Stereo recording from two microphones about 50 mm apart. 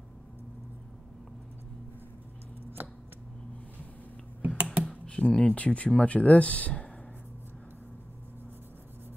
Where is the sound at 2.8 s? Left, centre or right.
Right.